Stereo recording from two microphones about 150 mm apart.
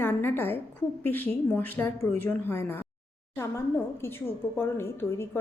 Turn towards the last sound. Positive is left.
turn(degrees=15)  # may be behind; listen again after turning